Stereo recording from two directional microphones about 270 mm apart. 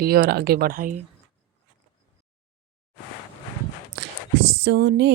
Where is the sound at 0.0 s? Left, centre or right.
Right.